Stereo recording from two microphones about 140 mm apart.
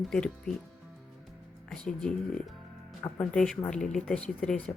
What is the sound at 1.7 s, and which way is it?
Speech, 5° left (ahead or behind).